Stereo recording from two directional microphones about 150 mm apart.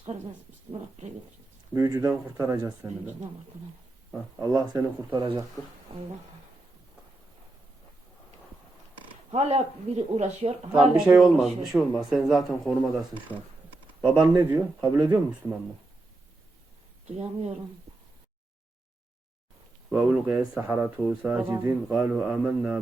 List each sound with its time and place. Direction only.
1.7 s speech: 20° right (ahead or behind)
4.4 s speech: 25° right (ahead or behind)
9.3 s speech: 45° right (ahead or behind)
10.7 s speech: 5° right (ahead or behind)
14.3 s speech: 25° right (ahead or behind)
17.1 s speech: 45° right (ahead or behind)
19.9 s a man's voice: 10° right (ahead or behind)